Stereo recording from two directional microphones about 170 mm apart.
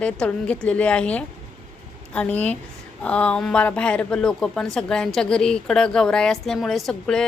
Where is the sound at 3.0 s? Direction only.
5° left (ahead or behind).